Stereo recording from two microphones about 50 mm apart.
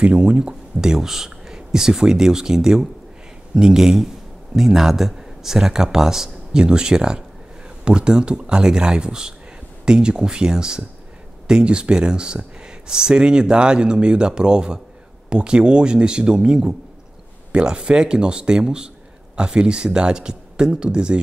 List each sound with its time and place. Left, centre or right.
0.0 s speech: right